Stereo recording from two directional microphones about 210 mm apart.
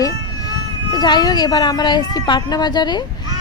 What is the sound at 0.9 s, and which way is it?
A woman's voice, 20° left (ahead or behind).